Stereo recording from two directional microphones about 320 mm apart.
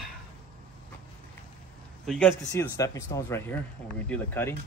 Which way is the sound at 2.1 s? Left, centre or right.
Centre.